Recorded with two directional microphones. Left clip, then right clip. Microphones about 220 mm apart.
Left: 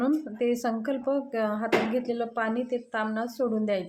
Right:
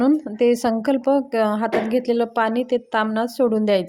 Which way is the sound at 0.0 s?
35° right (ahead or behind).